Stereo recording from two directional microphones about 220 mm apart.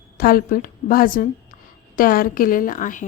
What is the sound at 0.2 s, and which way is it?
A woman's voice, 40° left (ahead or behind).